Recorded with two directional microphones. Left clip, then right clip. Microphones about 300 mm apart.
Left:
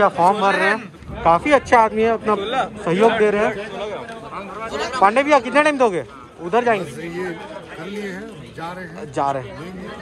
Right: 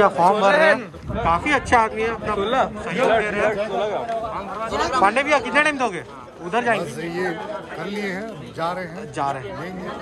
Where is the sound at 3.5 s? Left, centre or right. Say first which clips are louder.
Right 4 dB; right.